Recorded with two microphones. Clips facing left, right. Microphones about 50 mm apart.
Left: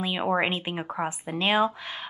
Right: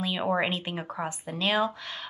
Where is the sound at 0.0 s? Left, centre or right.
Centre.